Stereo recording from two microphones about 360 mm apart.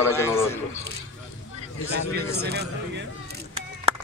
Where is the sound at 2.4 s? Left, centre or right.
Right.